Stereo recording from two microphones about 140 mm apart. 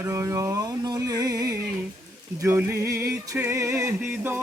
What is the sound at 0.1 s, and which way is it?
Music, 20° right (ahead or behind).